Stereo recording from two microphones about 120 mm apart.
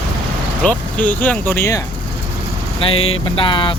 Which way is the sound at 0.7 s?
15° left (ahead or behind).